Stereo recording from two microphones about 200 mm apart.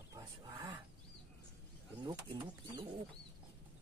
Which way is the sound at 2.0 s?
25° right (ahead or behind).